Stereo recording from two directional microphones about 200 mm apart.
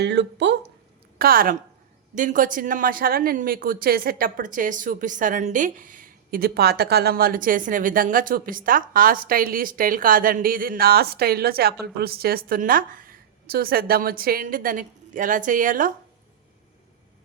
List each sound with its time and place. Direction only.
0.0 s speech: 55° right (ahead or behind)
1.2 s speech: 45° right (ahead or behind)